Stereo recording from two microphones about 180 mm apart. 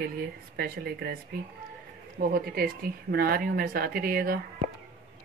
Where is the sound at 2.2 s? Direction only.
55° right (ahead or behind).